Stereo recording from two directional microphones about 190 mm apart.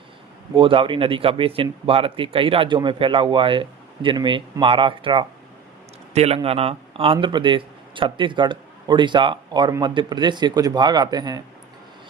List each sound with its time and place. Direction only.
0.5 s speech: 25° right (ahead or behind)